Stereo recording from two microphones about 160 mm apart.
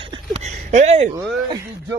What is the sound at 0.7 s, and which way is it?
Speech, 45° right (ahead or behind).